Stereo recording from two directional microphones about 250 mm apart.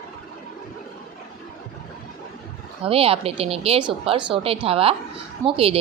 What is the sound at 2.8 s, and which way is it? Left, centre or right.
Speech, right.